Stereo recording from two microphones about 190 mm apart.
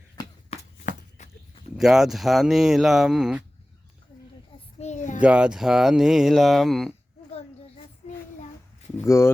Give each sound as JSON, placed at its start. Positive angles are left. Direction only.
{"t": 0.2, "sound": "a sound", "side_deg": 20}
{"t": 0.5, "sound": "walk", "side_deg": 40}
{"t": 1.7, "sound": "speech", "side_deg": 0}
{"t": 4.8, "sound": "child singing", "side_deg": 40}
{"t": 5.2, "sound": "speech", "side_deg": -5}
{"t": 9.0, "sound": "speech", "side_deg": 15}